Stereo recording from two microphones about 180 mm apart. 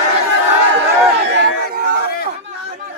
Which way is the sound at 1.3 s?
70° right (ahead or behind).